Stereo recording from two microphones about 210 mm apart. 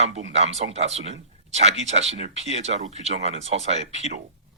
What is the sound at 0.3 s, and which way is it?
Speech, 30° right (ahead or behind).